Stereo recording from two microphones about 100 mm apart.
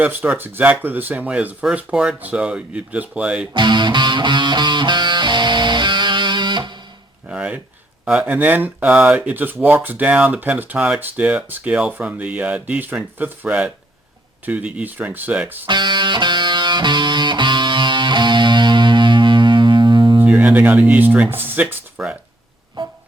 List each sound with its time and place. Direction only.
0.0 s speech: 15° right (ahead or behind)
3.5 s music: 50° right (ahead or behind)
7.3 s a sound: 10° right (ahead or behind)
8.0 s speech: 10° right (ahead or behind)
15.6 s music: 50° right (ahead or behind)
20.2 s speech: 15° right (ahead or behind)